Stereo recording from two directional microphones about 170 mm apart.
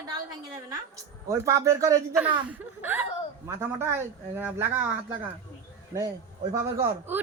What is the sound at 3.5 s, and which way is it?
Speech, 15° right (ahead or behind).